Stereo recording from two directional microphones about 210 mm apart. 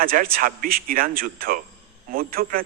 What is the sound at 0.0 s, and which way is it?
A man's voice, 45° right (ahead or behind).